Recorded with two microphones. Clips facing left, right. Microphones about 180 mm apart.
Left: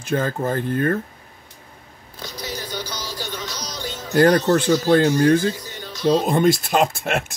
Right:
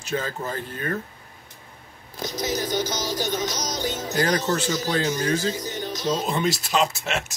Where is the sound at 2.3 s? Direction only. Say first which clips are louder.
Right 5 dB; 45° right (ahead or behind).